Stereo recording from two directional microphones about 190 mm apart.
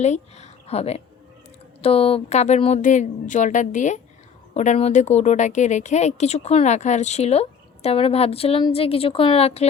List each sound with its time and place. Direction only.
0.0 s a woman's voice: 35° left (ahead or behind)